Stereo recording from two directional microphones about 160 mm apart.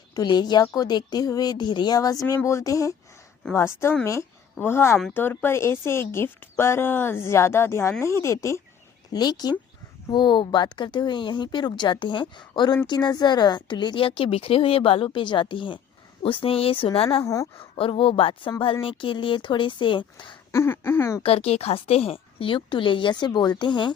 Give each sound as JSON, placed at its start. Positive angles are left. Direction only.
{"t": 0.1, "sound": "a woman's voice", "side_deg": 25}
{"t": 20.5, "sound": "speech", "side_deg": 15}
{"t": 21.2, "sound": "speech", "side_deg": 40}